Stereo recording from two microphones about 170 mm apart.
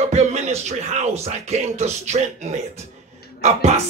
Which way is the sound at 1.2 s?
40° right (ahead or behind).